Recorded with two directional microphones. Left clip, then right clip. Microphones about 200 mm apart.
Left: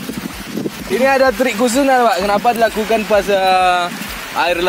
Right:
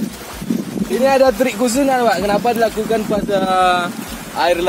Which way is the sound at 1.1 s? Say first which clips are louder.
Even; 20° left (ahead or behind).